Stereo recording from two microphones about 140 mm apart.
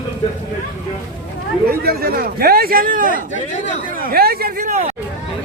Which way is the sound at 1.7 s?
90° right.